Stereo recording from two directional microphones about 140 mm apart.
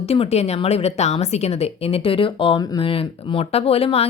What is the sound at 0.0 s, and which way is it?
Speech, 45° left (ahead or behind).